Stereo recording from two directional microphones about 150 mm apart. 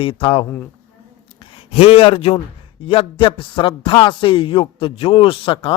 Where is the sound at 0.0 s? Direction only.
35° left (ahead or behind).